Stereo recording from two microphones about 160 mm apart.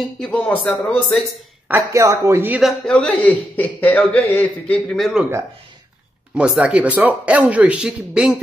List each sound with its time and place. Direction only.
0.0 s a man's voice: 5° left (ahead or behind)
1.7 s speech: 20° right (ahead or behind)
2.6 s a man's voice: centre (ahead or behind)
6.3 s speech: 5° right (ahead or behind)